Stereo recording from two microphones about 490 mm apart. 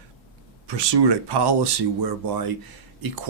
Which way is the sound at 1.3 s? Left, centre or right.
Right.